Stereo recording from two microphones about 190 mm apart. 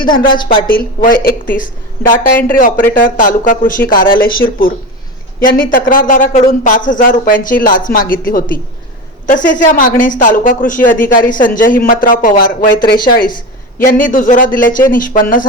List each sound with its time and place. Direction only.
1.0 s speech: 50° left (ahead or behind)